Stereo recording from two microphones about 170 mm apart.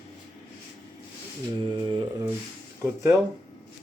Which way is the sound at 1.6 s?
30° right (ahead or behind).